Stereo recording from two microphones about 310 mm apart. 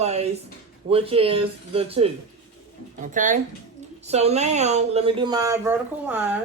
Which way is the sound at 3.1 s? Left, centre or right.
Right.